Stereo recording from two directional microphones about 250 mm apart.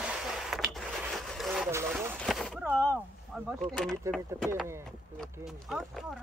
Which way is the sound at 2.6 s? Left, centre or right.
Centre.